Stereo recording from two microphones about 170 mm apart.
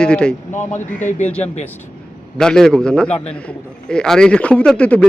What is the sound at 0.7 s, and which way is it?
Speech, 45° left (ahead or behind).